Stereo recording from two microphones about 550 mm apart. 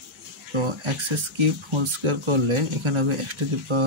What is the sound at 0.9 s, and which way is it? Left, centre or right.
Speech, right.